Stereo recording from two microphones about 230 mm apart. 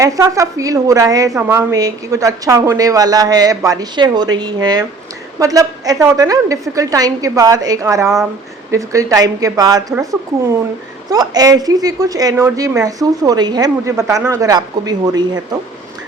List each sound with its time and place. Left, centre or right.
0.0 s a woman's voice: centre